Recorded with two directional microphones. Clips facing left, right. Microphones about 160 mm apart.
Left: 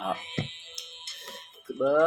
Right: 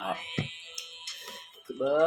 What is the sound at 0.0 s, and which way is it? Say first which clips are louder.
Music: left 2 dB; 30° left (ahead or behind).